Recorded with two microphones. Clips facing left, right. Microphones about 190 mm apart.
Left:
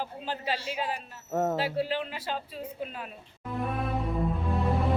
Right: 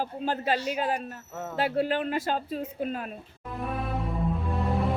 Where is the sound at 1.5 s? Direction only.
55° right (ahead or behind).